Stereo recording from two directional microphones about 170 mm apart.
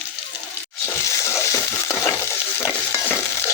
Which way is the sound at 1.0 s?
15° left (ahead or behind).